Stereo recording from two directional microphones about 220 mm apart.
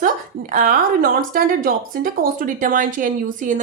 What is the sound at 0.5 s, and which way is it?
Speech, 35° right (ahead or behind).